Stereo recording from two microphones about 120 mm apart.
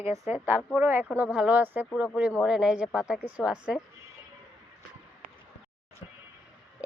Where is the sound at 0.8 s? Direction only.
15° right (ahead or behind).